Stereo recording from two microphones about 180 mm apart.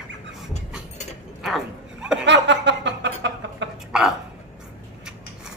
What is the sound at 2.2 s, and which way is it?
Chuckle, 80° right.